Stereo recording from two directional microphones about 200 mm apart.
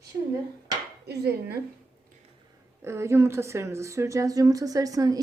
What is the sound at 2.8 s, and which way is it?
Speech, 15° right (ahead or behind).